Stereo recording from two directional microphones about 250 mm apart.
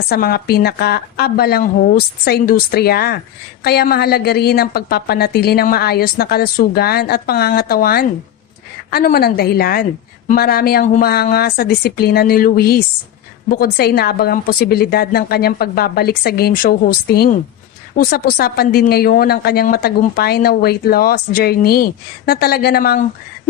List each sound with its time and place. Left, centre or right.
0.1 s a woman's voice: left